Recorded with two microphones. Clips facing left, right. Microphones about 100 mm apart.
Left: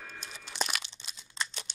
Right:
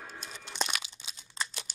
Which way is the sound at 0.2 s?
Centre (ahead or behind).